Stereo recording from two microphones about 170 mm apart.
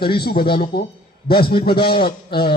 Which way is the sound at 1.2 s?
65° left (ahead or behind).